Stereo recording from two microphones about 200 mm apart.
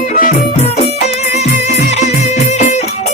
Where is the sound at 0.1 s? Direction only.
40° left (ahead or behind).